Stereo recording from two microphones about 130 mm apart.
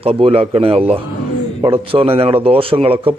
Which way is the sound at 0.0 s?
45° right (ahead or behind).